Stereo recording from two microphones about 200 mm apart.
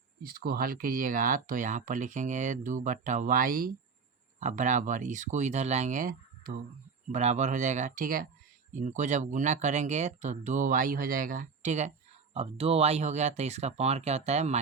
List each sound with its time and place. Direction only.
0.2 s speech: 50° right (ahead or behind); by 14.6 s 35° right (ahead or behind)